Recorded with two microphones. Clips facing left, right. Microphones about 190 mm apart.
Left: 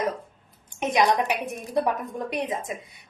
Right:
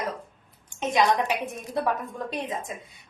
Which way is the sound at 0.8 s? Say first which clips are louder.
Left 1 dB; 20° left (ahead or behind).